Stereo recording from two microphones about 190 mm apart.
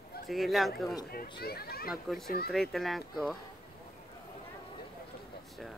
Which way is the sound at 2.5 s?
Centre (ahead or behind).